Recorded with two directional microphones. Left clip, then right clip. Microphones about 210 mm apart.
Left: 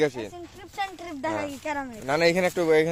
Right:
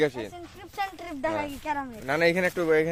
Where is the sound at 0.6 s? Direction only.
5° right (ahead or behind).